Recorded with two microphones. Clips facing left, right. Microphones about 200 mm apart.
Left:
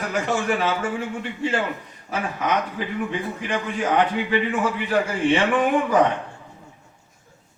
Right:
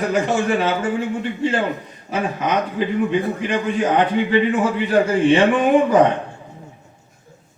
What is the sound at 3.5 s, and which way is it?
Speech, 20° right (ahead or behind).